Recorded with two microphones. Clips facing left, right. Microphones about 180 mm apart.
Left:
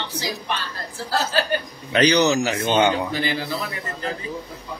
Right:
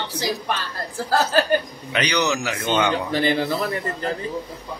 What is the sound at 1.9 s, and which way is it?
Speech, 35° left (ahead or behind).